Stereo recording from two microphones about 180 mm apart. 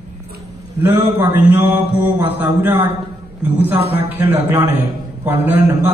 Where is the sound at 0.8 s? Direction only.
10° right (ahead or behind).